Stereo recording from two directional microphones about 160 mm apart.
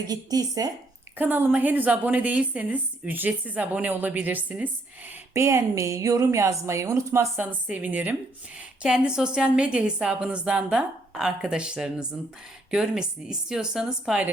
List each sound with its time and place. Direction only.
0.1 s speech: 25° right (ahead or behind)
1.2 s a woman's voice: 10° right (ahead or behind)